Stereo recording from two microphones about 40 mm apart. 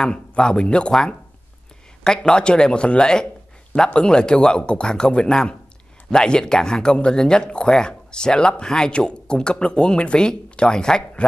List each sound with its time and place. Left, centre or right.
0.3 s speech: left
2.0 s speech: left